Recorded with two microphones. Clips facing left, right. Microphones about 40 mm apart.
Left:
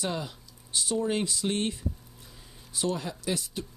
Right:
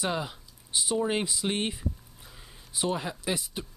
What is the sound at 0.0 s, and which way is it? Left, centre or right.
Speech, centre.